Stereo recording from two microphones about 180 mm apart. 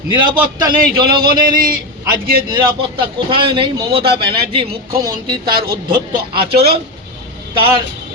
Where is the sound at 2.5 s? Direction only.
30° right (ahead or behind).